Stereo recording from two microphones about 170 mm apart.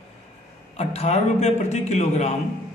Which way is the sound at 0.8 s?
35° left (ahead or behind).